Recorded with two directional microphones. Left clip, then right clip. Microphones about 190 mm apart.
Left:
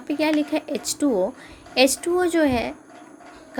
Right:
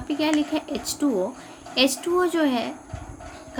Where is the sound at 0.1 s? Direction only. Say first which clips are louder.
Left 2 dB; 35° left (ahead or behind).